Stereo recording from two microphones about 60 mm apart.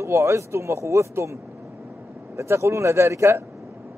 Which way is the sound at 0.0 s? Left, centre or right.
Right.